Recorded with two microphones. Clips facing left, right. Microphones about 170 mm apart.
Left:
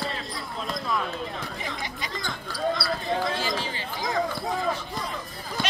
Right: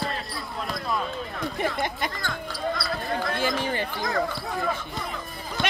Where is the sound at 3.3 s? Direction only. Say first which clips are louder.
Right 3 dB; 55° right (ahead or behind).